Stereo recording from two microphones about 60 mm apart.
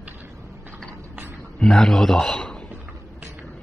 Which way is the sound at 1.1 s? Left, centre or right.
Right.